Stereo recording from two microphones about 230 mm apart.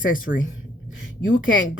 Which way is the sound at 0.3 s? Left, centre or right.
Left.